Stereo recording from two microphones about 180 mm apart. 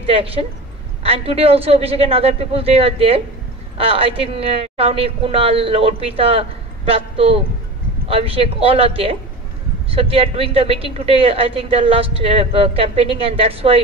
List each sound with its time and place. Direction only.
0.0 s a woman's voice: 30° right (ahead or behind)